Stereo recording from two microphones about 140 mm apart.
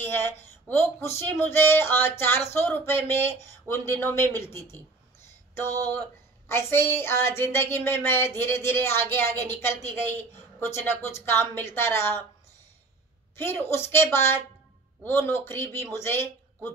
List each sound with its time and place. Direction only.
0.7 s speech: 10° left (ahead or behind)
5.5 s a sound: 15° left (ahead or behind)
6.5 s speech: 15° left (ahead or behind)
13.4 s speech: 15° left (ahead or behind)